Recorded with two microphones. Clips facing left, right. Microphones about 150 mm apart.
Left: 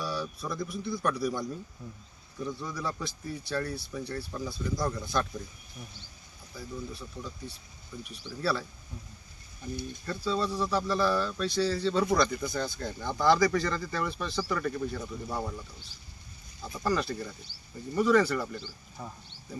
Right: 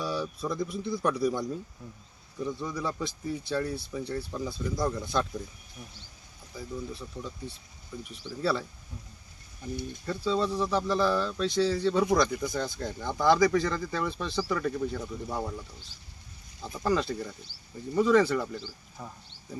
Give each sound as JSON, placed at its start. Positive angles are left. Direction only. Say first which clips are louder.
{"t": 0.0, "sound": "speech", "louder": "right 3 dB", "side_deg": -20}
{"t": 6.5, "sound": "speech", "louder": "right 2 dB", "side_deg": -15}
{"t": 10.1, "sound": "speech", "louder": "right 3 dB", "side_deg": -20}
{"t": 16.8, "sound": "speech", "louder": "right 2 dB", "side_deg": -20}
{"t": 18.5, "sound": "speech", "louder": "right 1 dB", "side_deg": 0}